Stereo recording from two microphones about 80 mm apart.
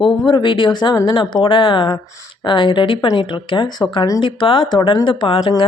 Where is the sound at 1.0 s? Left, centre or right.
Left.